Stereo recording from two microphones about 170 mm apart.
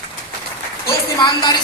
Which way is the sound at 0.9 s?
25° left (ahead or behind).